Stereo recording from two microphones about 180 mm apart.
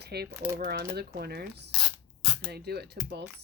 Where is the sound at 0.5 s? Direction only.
60° right (ahead or behind).